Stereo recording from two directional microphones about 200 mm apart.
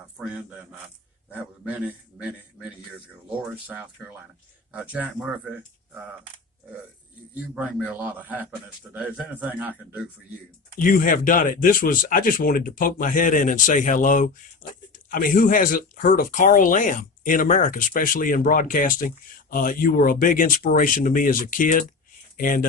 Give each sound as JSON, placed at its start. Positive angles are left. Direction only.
{"t": 0.2, "sound": "a man's voice", "side_deg": -5}
{"t": 7.3, "sound": "a man's voice", "side_deg": -5}
{"t": 10.8, "sound": "speech", "side_deg": 45}